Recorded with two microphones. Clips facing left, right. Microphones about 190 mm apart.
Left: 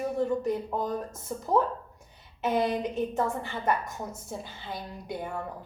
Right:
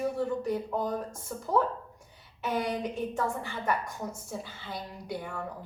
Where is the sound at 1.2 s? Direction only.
20° left (ahead or behind).